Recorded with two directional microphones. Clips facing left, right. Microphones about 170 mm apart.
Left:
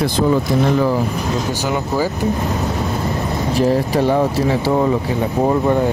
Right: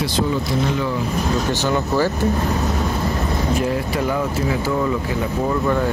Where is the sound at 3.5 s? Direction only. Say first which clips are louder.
Left 8 dB; 35° left (ahead or behind).